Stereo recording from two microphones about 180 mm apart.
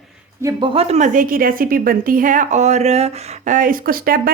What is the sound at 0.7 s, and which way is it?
A woman's voice, 35° right (ahead or behind).